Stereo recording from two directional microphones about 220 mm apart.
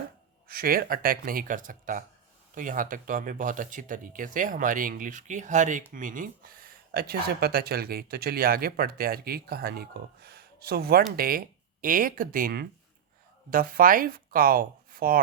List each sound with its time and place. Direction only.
0.4 s speech: 40° right (ahead or behind)